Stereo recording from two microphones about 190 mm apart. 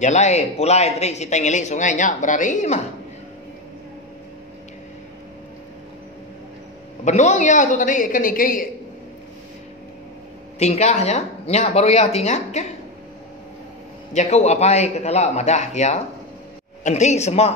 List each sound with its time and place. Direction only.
0.0 s a man's voice: 35° left (ahead or behind)
7.1 s a man's voice: 40° left (ahead or behind)
10.6 s a man's voice: 35° left (ahead or behind)
14.1 s a man's voice: 35° left (ahead or behind)